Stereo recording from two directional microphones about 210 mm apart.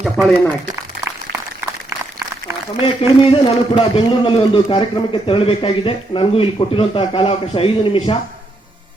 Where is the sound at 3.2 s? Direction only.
25° left (ahead or behind).